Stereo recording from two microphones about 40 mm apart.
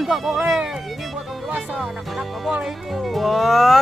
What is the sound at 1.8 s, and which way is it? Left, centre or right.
Speech, centre.